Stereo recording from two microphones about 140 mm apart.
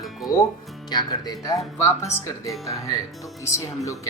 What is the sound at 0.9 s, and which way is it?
Speech, 30° left (ahead or behind).